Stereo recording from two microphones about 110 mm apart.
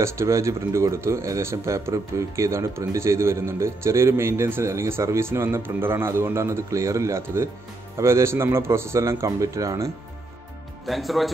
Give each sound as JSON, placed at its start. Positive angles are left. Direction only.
{"t": 0.0, "sound": "speech", "side_deg": -25}
{"t": 10.9, "sound": "speech", "side_deg": 0}